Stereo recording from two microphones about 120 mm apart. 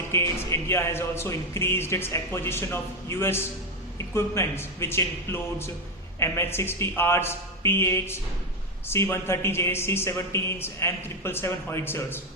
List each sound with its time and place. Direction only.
0.1 s speech: 20° left (ahead or behind)